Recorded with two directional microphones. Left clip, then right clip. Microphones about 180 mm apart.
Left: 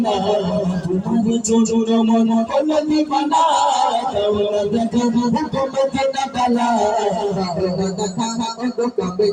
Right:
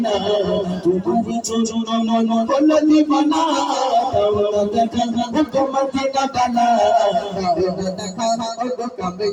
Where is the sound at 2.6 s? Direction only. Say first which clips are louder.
Right 3 dB; 35° right (ahead or behind).